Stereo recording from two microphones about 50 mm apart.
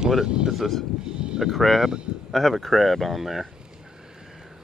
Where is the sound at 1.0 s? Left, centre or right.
Centre.